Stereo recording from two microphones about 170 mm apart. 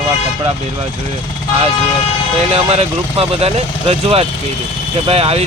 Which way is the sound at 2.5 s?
35° right (ahead or behind).